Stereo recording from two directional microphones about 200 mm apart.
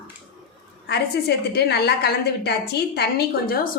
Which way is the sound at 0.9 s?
55° left (ahead or behind).